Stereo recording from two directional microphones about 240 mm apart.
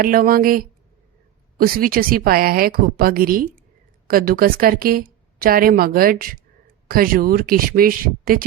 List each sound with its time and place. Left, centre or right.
0.0 s a woman's voice: right